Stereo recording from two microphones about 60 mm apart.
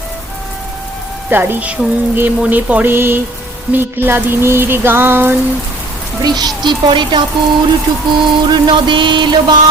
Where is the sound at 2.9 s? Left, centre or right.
Right.